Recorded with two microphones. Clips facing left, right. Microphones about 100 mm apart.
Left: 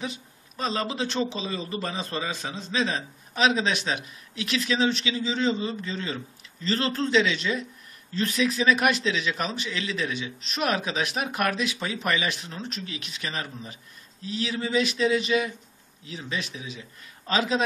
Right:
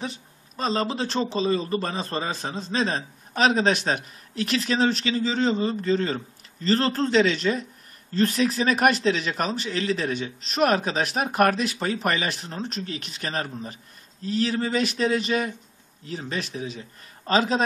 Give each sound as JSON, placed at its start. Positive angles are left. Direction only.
{"t": 0.0, "sound": "a man's voice", "side_deg": -35}